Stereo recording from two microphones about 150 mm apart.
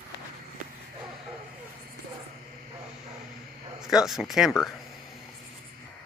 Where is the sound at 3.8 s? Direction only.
5° right (ahead or behind).